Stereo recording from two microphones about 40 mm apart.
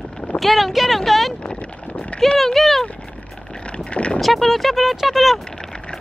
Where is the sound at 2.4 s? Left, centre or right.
Centre.